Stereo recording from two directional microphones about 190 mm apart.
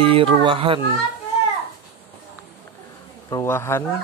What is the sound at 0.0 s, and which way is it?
Speech, 30° right (ahead or behind).